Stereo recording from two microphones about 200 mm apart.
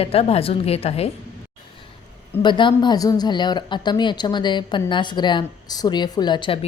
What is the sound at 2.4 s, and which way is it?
Speech, 25° left (ahead or behind).